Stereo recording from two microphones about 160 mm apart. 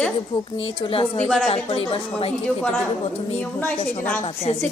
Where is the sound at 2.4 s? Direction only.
10° left (ahead or behind).